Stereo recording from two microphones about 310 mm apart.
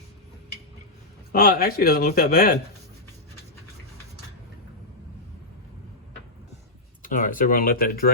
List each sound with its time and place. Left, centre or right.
1.3 s speech: left
7.0 s speech: left